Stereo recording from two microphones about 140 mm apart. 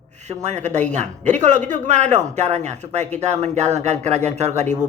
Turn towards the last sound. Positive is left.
turn(degrees=-55)  # may be behind; listen again after turning